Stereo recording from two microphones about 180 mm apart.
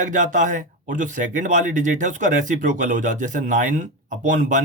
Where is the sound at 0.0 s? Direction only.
45° right (ahead or behind).